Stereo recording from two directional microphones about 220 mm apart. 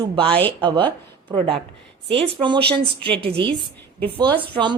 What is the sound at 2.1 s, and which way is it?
Speech, 25° right (ahead or behind).